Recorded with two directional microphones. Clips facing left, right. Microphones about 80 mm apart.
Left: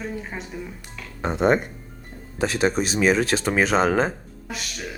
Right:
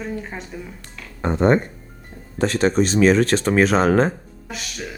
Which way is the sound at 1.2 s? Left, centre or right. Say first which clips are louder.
Right 3 dB; centre.